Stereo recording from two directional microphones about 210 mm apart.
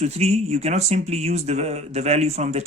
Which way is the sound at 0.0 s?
30° right (ahead or behind).